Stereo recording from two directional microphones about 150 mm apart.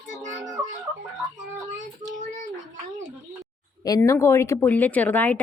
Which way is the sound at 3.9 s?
20° left (ahead or behind).